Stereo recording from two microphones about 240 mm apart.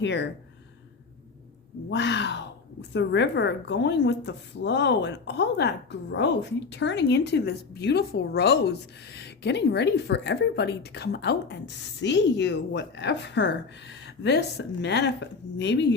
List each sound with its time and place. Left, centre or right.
0.0 s speech: left
1.9 s speech: left